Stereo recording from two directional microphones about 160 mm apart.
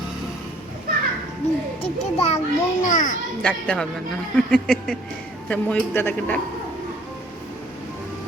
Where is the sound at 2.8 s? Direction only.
55° left (ahead or behind).